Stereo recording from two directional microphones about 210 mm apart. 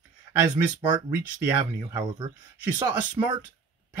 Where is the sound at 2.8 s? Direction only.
5° right (ahead or behind).